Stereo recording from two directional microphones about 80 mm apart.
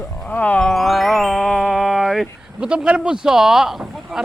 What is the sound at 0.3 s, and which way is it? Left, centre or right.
Music, centre.